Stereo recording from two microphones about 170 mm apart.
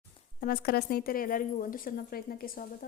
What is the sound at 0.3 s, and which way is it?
A woman's voice, 60° left (ahead or behind).